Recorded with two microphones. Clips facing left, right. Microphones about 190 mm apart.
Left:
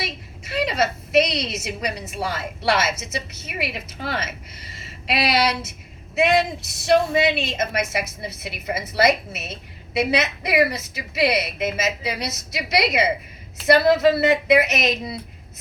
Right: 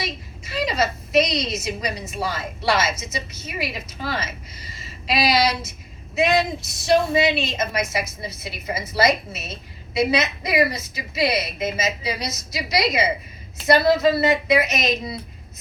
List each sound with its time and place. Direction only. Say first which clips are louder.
0.0 s a woman's voice: right 1 dB; 65° left (ahead or behind)
6.8 s a woman's voice: even; 60° left (ahead or behind)